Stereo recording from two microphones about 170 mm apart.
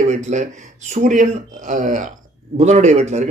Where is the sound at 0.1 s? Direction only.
45° right (ahead or behind).